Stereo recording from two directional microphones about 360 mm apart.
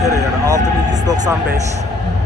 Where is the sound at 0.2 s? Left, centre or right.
Centre.